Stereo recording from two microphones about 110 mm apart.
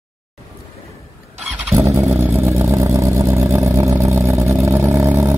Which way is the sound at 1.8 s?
25° right (ahead or behind).